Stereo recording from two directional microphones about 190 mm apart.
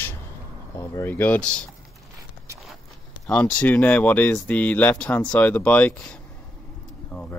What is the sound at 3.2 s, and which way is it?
Speech, 5° left (ahead or behind).